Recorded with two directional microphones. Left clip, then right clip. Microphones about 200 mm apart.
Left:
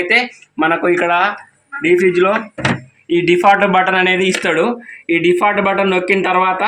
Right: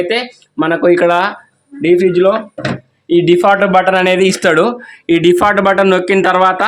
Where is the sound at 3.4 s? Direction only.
55° right (ahead or behind).